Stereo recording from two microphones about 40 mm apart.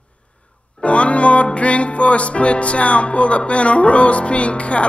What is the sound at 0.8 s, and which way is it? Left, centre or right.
Music, left.